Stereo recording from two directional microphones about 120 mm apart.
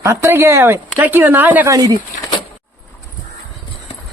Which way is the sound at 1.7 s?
30° right (ahead or behind).